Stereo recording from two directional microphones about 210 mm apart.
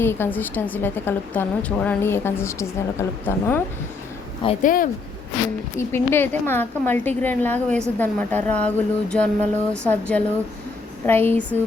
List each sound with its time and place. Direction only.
0.0 s a woman's voice: 10° left (ahead or behind)
4.6 s speech: 40° left (ahead or behind)
5.7 s a woman's voice: 10° left (ahead or behind)